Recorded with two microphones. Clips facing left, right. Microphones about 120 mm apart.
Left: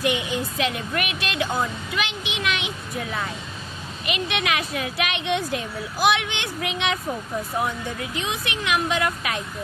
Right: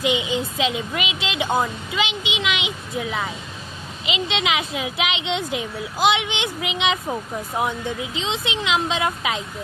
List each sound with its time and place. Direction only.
0.0 s a woman's voice: 15° right (ahead or behind)